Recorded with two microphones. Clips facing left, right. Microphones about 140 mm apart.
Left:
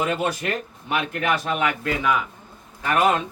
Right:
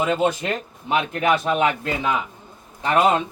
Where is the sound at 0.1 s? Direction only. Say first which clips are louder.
Right 3 dB; 25° right (ahead or behind).